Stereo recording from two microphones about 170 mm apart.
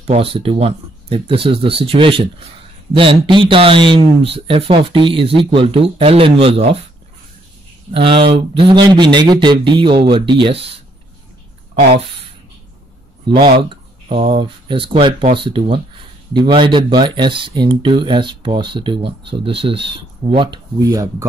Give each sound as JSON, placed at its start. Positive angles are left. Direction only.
{"t": 0.0, "sound": "speech", "side_deg": -35}
{"t": 7.9, "sound": "speech", "side_deg": -30}
{"t": 13.3, "sound": "speech", "side_deg": -30}